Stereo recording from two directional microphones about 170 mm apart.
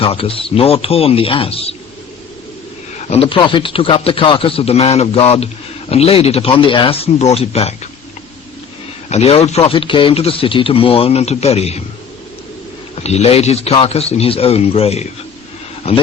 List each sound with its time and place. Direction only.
0.0 s a man's voice: 35° left (ahead or behind)
3.0 s a man's voice: 35° left (ahead or behind)
9.0 s a man's voice: 40° left (ahead or behind)
13.0 s a man's voice: 40° left (ahead or behind)